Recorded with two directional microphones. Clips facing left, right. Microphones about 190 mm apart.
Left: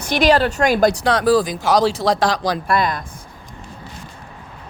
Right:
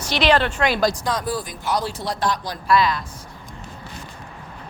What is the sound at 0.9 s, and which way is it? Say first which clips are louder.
Speech: left 9 dB; 70° left (ahead or behind).